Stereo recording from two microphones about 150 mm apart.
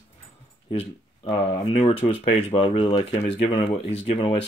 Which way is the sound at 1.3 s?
40° left (ahead or behind).